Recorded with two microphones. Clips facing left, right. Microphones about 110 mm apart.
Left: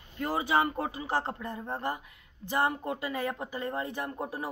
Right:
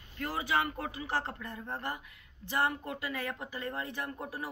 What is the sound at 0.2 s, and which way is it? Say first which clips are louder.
Speech: left 5 dB; 25° left (ahead or behind).